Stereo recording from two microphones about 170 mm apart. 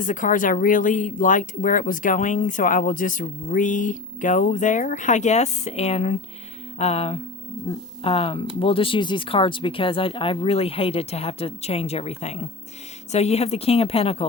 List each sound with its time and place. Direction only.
0.0 s speech: 50° left (ahead or behind)